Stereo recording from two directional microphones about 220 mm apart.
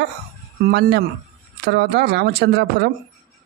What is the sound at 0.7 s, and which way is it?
Speech, 50° right (ahead or behind).